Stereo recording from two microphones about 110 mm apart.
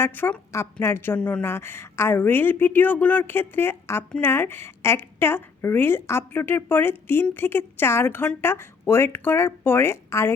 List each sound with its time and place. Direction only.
0.0 s a woman's voice: 15° left (ahead or behind)